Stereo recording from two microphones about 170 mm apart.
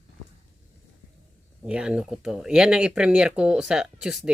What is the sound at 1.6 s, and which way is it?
Speech, 5° right (ahead or behind).